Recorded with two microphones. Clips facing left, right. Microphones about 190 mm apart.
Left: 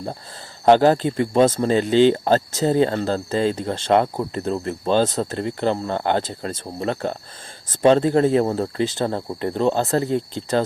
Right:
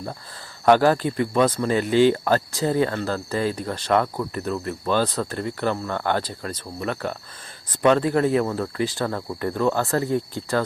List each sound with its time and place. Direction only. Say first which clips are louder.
0.6 s speech: left 2 dB; 25° left (ahead or behind)